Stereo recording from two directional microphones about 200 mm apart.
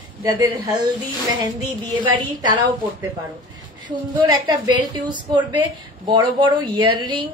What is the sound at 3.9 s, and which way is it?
A woman's voice, 20° right (ahead or behind).